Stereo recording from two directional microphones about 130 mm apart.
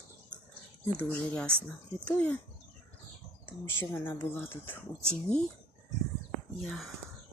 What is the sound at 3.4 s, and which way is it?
Speech, 20° left (ahead or behind).